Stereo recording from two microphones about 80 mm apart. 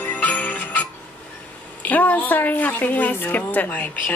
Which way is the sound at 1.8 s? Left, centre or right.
Left.